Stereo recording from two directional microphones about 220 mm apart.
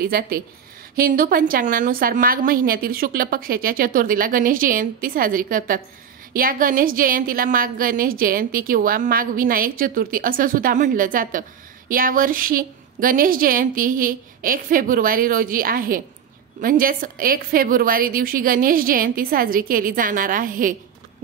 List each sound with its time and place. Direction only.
0.0 s a woman's voice: 45° right (ahead or behind)